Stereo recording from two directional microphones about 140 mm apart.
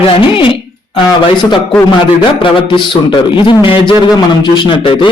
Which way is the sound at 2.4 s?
35° left (ahead or behind).